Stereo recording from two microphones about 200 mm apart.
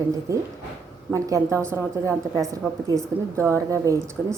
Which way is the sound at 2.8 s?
15° right (ahead or behind).